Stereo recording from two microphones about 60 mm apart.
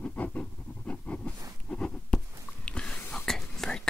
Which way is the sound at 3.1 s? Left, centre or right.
Centre.